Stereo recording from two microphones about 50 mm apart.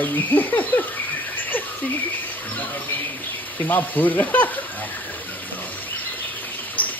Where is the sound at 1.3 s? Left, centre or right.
Left.